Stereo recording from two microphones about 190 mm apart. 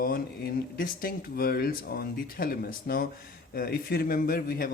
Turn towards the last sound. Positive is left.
turn(degrees=50)  # may be behind; listen again after turning